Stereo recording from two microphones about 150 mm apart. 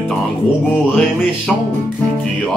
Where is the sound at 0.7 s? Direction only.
5° left (ahead or behind).